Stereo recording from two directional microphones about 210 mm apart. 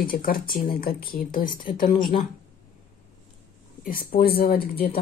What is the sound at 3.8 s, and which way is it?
Speech, 45° left (ahead or behind).